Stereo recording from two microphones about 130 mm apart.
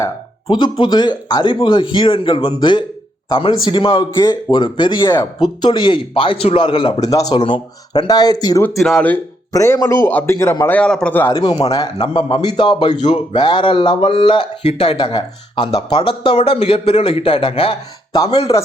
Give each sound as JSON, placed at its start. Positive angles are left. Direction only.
{"t": 0.4, "sound": "speech", "side_deg": 35}
{"t": 7.0, "sound": "a man's voice", "side_deg": 25}
{"t": 8.7, "sound": "speech", "side_deg": 0}
{"t": 9.5, "sound": "a man's voice", "side_deg": 25}
{"t": 10.8, "sound": "speech", "side_deg": 10}
{"t": 11.3, "sound": "speech", "side_deg": 40}
{"t": 11.7, "sound": "a man's voice", "side_deg": 30}
{"t": 12.0, "sound": "speech", "side_deg": 40}
{"t": 16.3, "sound": "speech", "side_deg": 50}